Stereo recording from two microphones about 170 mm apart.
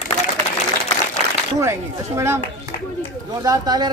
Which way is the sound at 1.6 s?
15° right (ahead or behind).